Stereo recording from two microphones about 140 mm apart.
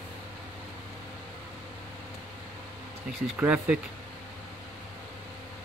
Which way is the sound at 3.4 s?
10° right (ahead or behind).